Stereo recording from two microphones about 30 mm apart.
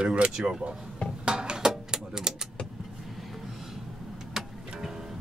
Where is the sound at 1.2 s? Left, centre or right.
Right.